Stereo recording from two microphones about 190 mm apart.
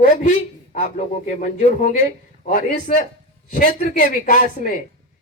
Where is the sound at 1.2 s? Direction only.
40° left (ahead or behind).